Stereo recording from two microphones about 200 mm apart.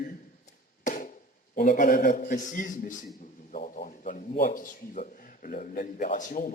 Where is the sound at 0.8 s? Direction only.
40° left (ahead or behind).